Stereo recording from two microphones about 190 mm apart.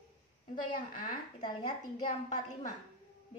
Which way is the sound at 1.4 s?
20° left (ahead or behind).